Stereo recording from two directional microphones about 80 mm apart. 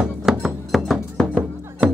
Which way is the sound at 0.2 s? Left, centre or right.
Centre.